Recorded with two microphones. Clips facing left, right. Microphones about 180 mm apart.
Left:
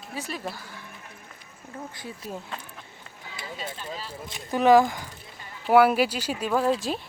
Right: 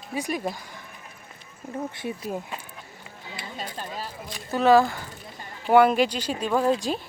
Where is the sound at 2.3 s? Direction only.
10° right (ahead or behind).